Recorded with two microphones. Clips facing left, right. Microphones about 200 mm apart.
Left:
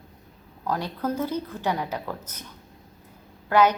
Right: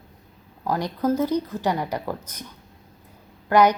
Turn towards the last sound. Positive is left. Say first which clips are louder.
# right 2 dB
turn(degrees=-15)  # may be behind; listen again after turning